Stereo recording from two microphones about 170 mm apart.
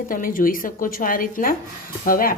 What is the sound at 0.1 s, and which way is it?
A woman's voice, 55° left (ahead or behind).